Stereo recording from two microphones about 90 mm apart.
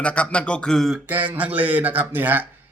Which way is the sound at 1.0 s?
20° right (ahead or behind).